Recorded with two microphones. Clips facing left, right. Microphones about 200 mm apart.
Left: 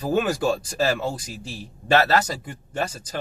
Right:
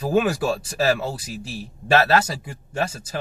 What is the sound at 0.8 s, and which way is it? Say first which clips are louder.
Speech: right 2 dB; 5° right (ahead or behind).